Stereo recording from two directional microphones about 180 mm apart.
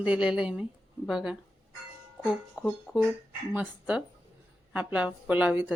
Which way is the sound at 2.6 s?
10° right (ahead or behind).